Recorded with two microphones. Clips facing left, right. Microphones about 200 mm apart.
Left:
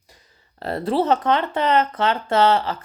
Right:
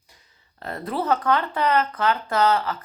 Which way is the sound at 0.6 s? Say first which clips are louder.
Left 7 dB; 30° left (ahead or behind).